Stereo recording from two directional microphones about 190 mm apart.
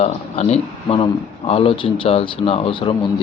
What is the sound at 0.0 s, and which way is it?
Speech, 35° left (ahead or behind).